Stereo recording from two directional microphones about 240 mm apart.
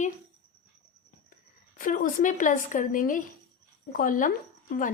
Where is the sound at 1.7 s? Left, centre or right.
Left.